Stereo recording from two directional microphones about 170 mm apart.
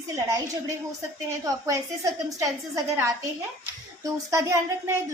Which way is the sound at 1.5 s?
20° right (ahead or behind).